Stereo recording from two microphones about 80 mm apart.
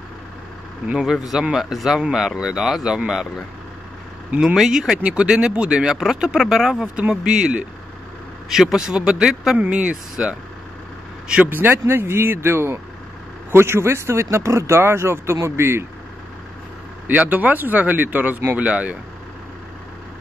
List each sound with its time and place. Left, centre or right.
0.8 s speech: centre
4.6 s speech: centre
11.4 s speech: right
17.1 s speech: right